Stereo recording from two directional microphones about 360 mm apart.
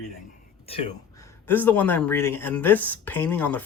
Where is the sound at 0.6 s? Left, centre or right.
Centre.